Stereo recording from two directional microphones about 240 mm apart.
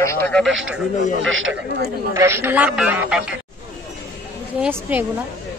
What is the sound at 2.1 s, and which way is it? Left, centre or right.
A man's voice, centre.